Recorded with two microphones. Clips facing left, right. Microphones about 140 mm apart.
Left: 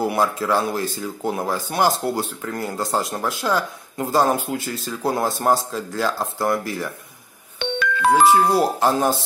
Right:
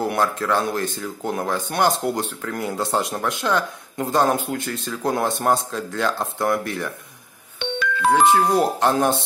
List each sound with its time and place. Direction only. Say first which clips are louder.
0.0 s speech: left 1 dB; 10° left (ahead or behind)
7.5 s music: left 1 dB; 60° left (ahead or behind)
8.5 s speech: even; 5° left (ahead or behind)